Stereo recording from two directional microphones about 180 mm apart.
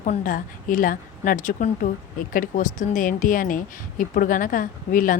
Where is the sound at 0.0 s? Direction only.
45° left (ahead or behind).